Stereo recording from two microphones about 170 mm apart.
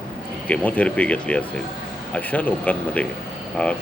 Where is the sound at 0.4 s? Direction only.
5° left (ahead or behind).